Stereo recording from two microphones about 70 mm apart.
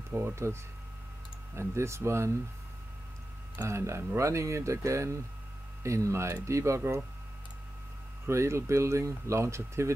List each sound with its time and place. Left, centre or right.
0.1 s speech: right
3.6 s speech: right
8.3 s speech: right